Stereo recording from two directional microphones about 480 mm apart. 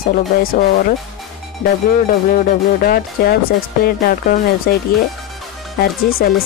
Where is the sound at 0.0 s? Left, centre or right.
Centre.